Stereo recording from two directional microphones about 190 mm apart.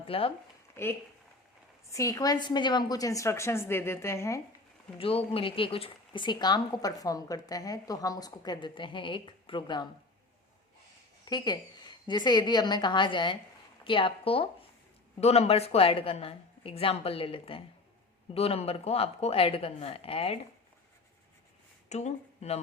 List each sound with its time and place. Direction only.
0.0 s speech: 30° left (ahead or behind)
0.8 s a woman's voice: 15° left (ahead or behind)
4.9 s speech: 30° left (ahead or behind)
11.3 s speech: 20° left (ahead or behind)
21.8 s speech: 35° left (ahead or behind)